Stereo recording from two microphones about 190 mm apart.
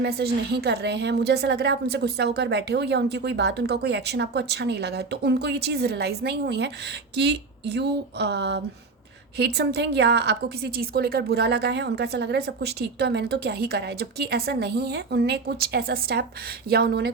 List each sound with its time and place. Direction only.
0.0 s a woman's voice: 55° right (ahead or behind)